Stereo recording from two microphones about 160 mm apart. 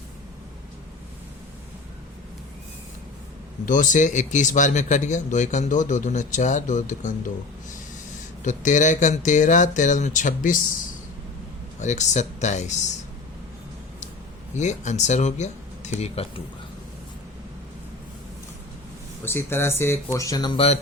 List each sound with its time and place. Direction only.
3.7 s speech: 55° left (ahead or behind)
8.4 s speech: 50° left (ahead or behind)
11.8 s speech: 45° left (ahead or behind)
14.5 s speech: 45° left (ahead or behind)
19.2 s speech: 15° left (ahead or behind)